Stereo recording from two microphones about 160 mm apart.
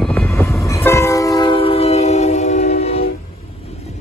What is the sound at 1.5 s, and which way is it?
Train, 35° left (ahead or behind).